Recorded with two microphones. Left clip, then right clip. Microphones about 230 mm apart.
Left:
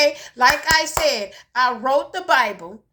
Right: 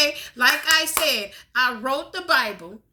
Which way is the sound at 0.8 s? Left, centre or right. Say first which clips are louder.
Left 2 dB; left.